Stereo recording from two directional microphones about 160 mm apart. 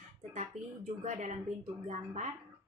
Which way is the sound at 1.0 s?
50° right (ahead or behind).